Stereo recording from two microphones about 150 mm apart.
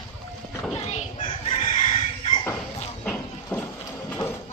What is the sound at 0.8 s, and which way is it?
Chicken, 45° left (ahead or behind).